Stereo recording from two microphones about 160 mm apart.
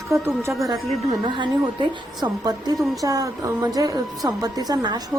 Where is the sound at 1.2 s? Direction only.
30° right (ahead or behind).